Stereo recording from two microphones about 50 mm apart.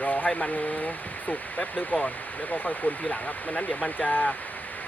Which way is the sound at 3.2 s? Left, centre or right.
Left.